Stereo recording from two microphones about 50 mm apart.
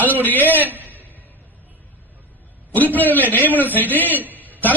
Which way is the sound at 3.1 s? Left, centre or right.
Left.